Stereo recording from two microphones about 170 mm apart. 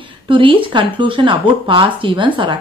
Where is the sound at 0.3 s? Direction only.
30° right (ahead or behind).